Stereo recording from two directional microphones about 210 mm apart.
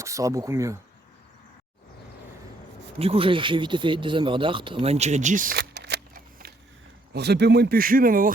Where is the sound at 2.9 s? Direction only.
25° right (ahead or behind).